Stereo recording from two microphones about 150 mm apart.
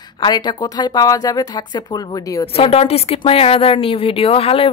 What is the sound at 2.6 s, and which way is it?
Speech, 40° left (ahead or behind).